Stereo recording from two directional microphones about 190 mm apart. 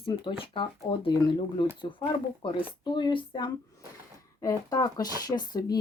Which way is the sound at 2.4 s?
25° left (ahead or behind).